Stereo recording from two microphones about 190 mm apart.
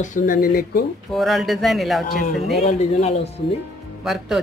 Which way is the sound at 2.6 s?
35° left (ahead or behind).